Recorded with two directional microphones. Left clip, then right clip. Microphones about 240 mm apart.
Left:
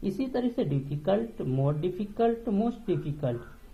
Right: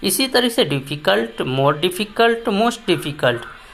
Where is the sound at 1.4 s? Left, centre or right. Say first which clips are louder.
Right 14 dB; right.